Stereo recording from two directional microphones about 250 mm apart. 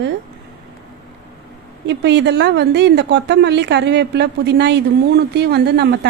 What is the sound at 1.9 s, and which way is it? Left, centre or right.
A woman's voice, right.